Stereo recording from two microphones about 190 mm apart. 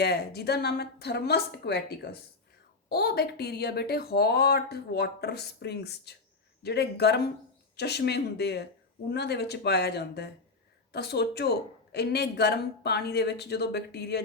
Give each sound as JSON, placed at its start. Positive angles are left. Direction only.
{"t": 0.0, "sound": "speech", "side_deg": 60}